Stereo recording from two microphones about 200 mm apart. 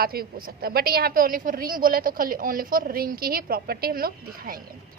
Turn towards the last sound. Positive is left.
turn(degrees=-45)  # may be behind; listen again after turning